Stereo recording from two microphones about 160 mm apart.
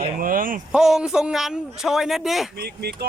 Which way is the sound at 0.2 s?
60° right (ahead or behind).